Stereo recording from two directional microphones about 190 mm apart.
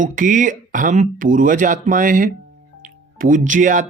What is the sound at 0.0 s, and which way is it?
Speech, 45° right (ahead or behind).